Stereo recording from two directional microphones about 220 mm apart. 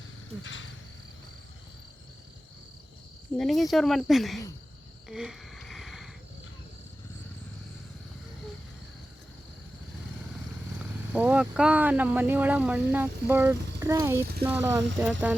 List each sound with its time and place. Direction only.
0.4 s cricket: 60° left (ahead or behind)
3.3 s speech: centre (ahead or behind)
5.0 s a sound: centre (ahead or behind)
10.8 s speech: 5° right (ahead or behind)